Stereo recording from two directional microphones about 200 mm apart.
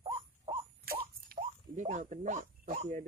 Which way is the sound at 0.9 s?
50° right (ahead or behind).